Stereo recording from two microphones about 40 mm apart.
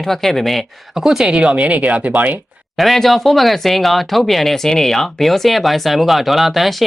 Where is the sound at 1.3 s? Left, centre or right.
Right.